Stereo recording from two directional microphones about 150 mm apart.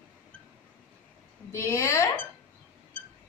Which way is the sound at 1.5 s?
20° left (ahead or behind).